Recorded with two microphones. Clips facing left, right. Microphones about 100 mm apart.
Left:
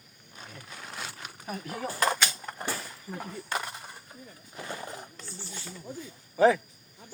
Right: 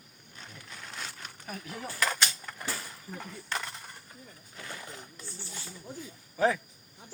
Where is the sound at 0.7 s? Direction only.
10° left (ahead or behind).